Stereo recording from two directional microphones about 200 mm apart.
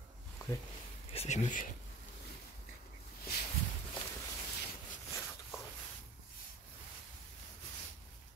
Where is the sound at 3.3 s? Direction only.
50° left (ahead or behind).